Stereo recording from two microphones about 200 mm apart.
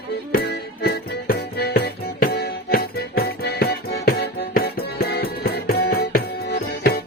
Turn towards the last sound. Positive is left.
turn(degrees=50)  # may be behind; listen again after turning